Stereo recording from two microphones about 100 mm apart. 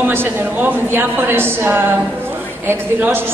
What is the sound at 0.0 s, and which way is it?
A woman's voice, 20° right (ahead or behind).